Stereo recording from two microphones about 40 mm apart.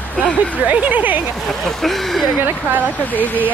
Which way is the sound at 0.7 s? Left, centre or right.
Right.